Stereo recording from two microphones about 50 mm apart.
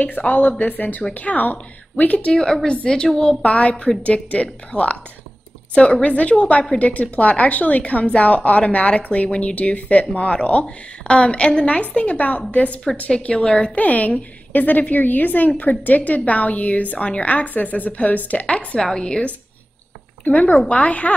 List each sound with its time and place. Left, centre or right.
0.0 s a woman's voice: left
2.3 s a woman's voice: centre
13.3 s speech: centre
13.7 s a woman's voice: left
18.8 s speech: centre
20.2 s a woman's voice: left